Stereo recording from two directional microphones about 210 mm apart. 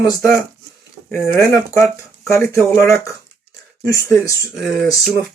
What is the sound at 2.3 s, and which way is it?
Speech, 15° left (ahead or behind).